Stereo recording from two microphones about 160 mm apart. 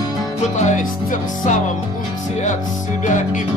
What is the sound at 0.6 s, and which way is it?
Music, 50° left (ahead or behind).